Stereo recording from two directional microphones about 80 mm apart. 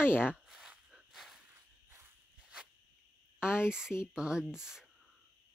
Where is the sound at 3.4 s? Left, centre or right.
Centre.